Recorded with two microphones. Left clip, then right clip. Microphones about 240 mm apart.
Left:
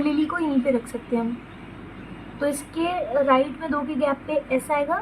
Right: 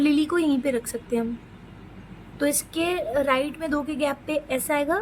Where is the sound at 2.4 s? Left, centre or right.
Right.